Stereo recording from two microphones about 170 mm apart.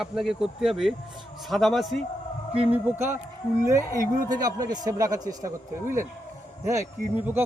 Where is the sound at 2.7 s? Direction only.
10° right (ahead or behind).